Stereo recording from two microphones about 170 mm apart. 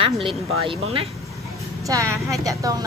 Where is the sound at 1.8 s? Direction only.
20° right (ahead or behind).